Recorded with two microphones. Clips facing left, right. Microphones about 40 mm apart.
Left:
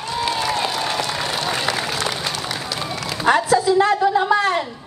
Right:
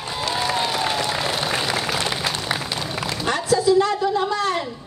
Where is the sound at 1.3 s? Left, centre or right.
Centre.